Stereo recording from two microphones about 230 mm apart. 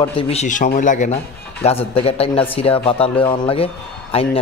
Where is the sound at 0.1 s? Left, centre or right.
Left.